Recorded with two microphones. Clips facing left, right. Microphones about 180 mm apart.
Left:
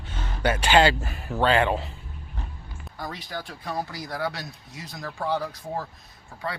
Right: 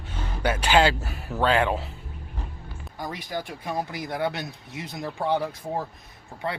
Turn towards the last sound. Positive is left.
turn(degrees=-25)  # may be behind; listen again after turning